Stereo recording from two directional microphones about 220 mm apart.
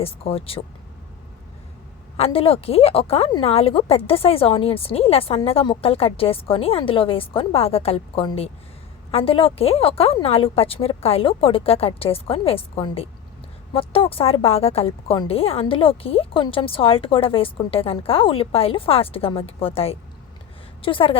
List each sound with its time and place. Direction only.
0.0 s a woman's voice: 25° left (ahead or behind)
2.1 s a woman's voice: 25° left (ahead or behind)